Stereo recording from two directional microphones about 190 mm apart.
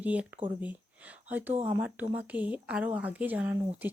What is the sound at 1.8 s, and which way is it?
Speech, 10° right (ahead or behind).